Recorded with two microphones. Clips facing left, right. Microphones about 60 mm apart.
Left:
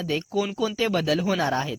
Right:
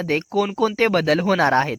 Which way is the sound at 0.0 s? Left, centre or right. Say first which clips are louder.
Right 5 dB; right.